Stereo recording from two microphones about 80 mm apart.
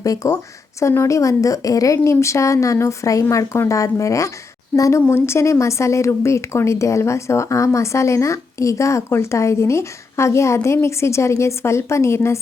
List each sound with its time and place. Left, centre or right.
0.0 s speech: left